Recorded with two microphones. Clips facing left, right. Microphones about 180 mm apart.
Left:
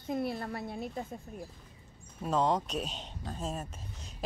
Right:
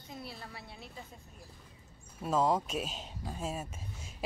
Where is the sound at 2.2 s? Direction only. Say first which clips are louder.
Even; 5° right (ahead or behind).